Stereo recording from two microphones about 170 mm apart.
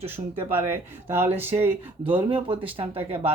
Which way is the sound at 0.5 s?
15° right (ahead or behind).